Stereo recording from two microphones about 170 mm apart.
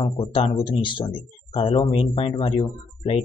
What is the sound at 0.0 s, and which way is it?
Speech, 30° left (ahead or behind).